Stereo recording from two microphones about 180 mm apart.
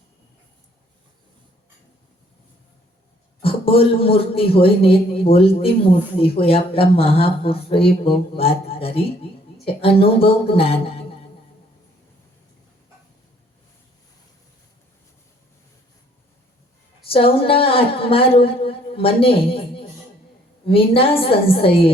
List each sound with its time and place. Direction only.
3.4 s a man's voice: 30° left (ahead or behind)
17.1 s a man's voice: 30° left (ahead or behind)